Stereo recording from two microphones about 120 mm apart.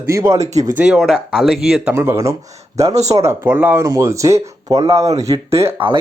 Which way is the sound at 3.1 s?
25° right (ahead or behind).